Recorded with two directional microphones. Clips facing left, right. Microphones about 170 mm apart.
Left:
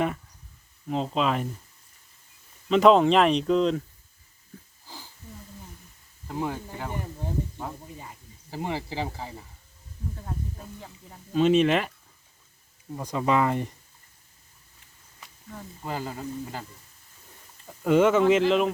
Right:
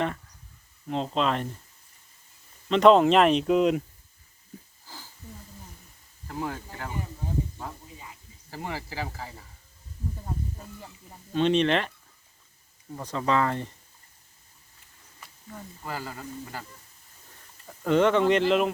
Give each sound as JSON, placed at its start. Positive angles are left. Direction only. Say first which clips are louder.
{"t": 0.9, "sound": "speech", "louder": "left 1 dB", "side_deg": 0}
{"t": 2.6, "sound": "speech", "louder": "even", "side_deg": 0}
{"t": 6.2, "sound": "speech", "louder": "left 3 dB", "side_deg": 15}
{"t": 8.4, "sound": "a man's voice", "louder": "left 4 dB", "side_deg": 20}
{"t": 11.3, "sound": "speech", "louder": "left 2 dB", "side_deg": 5}
{"t": 13.0, "sound": "speech", "louder": "left 2 dB", "side_deg": 10}
{"t": 15.8, "sound": "a man's voice", "louder": "left 4 dB", "side_deg": 20}
{"t": 17.7, "sound": "speech", "louder": "left 2 dB", "side_deg": 5}